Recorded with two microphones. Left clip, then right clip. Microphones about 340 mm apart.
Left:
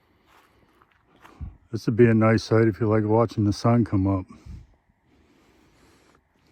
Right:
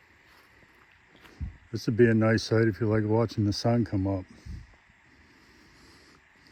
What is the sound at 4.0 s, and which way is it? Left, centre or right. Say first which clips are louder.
Speech: left 5 dB; left.